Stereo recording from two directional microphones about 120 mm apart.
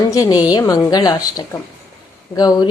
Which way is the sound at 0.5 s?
30° left (ahead or behind).